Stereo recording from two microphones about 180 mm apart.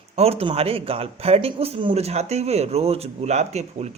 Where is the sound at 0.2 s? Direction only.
35° right (ahead or behind).